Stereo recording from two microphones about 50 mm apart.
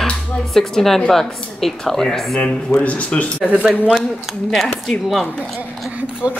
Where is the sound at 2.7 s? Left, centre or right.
Left.